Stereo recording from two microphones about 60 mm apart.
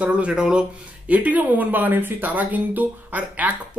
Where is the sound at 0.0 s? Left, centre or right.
Right.